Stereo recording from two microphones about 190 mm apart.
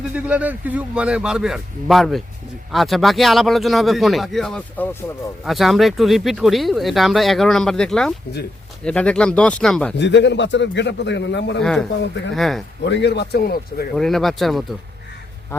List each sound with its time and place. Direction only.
0.1 s speech: 5° right (ahead or behind)
10.0 s speech: 70° left (ahead or behind)
11.6 s speech: 5° left (ahead or behind)
12.8 s a man's voice: 65° left (ahead or behind)
13.9 s speech: centre (ahead or behind)